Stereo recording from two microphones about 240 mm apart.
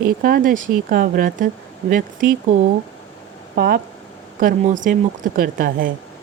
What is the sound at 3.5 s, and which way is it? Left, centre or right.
Speech, right.